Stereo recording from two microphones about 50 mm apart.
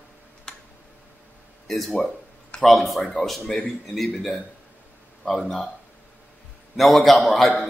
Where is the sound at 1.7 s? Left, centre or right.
Centre.